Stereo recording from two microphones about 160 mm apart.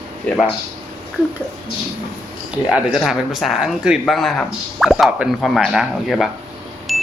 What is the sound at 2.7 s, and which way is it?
Speech, 5° right (ahead or behind).